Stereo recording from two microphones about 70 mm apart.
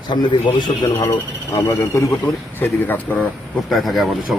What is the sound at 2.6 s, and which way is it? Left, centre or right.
Speech, left.